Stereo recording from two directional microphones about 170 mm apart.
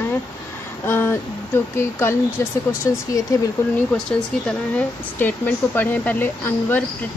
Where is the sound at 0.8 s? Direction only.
15° left (ahead or behind).